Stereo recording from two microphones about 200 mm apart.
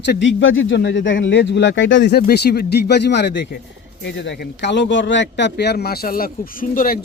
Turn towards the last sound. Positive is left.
turn(degrees=45)  # may be behind; listen again after turning